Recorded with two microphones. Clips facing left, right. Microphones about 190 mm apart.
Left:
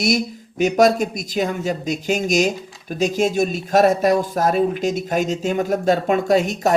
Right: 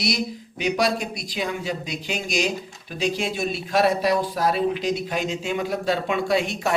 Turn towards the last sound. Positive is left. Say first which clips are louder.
# left 6 dB
turn(degrees=40)  # may be behind; listen again after turning